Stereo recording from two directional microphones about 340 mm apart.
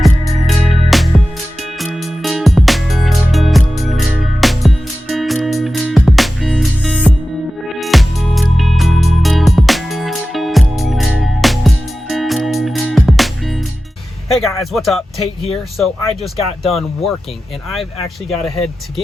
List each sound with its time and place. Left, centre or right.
0.0 s music: centre
14.3 s speech: centre
18.3 s speech: centre